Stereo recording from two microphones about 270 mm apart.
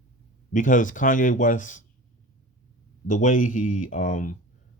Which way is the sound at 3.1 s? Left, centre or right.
Left.